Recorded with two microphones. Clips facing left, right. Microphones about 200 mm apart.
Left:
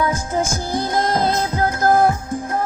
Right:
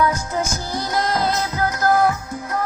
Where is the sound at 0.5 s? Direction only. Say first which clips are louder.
Left 3 dB; 50° left (ahead or behind).